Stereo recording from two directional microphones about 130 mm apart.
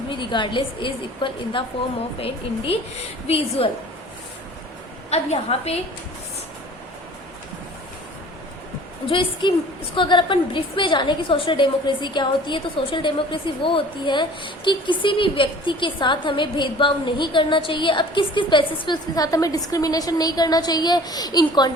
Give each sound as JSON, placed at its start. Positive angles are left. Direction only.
{"t": 0.1, "sound": "a woman's voice", "side_deg": 35}
{"t": 5.1, "sound": "a woman's voice", "side_deg": 55}
{"t": 9.0, "sound": "a woman's voice", "side_deg": 40}